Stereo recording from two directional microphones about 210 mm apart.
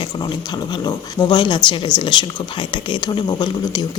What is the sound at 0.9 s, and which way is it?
Speech, 20° left (ahead or behind).